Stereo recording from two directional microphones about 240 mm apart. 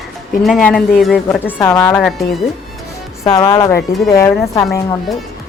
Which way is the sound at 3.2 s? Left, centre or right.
Centre.